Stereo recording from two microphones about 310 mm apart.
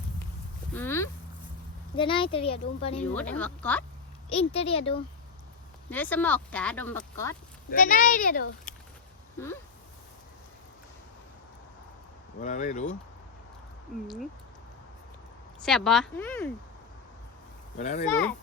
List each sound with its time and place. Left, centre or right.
0.7 s a sound: centre
2.0 s speech: centre
3.2 s speech: centre
4.3 s a child's voice: centre
5.9 s speech: centre
7.7 s a child's voice: left
12.4 s a child's voice: left
15.6 s speech: centre
17.7 s a child's voice: left